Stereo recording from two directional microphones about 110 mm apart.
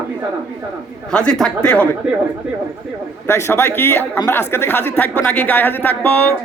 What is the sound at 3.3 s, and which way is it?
Speech, 25° left (ahead or behind).